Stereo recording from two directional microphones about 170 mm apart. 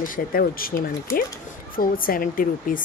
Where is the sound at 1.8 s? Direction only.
55° left (ahead or behind).